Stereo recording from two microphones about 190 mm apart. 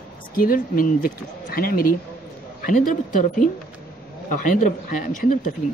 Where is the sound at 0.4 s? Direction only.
50° left (ahead or behind).